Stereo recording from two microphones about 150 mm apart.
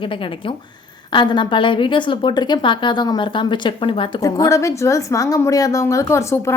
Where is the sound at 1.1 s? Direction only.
30° left (ahead or behind).